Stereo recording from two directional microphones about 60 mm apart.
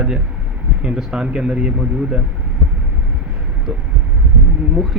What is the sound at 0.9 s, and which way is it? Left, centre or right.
Speech, centre.